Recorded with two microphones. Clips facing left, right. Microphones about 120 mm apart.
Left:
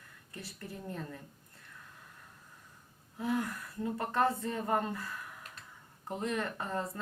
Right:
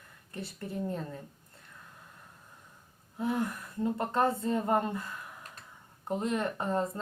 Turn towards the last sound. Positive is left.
turn(degrees=-25)  # may be behind; listen again after turning